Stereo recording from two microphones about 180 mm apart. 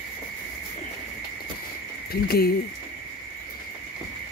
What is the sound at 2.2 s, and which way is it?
Speech, 60° left (ahead or behind).